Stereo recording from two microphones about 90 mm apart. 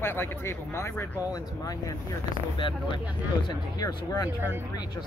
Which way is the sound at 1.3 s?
40° left (ahead or behind).